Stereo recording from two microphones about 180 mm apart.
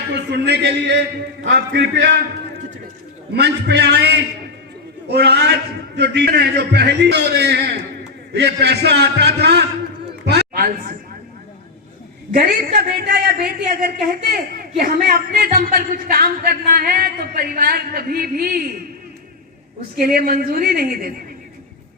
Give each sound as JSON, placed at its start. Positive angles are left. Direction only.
{"t": 0.1, "sound": "a man's voice", "side_deg": -65}
{"t": 3.3, "sound": "a man's voice", "side_deg": -70}
{"t": 12.3, "sound": "a man's voice", "side_deg": -50}
{"t": 20.0, "sound": "a man's voice", "side_deg": -55}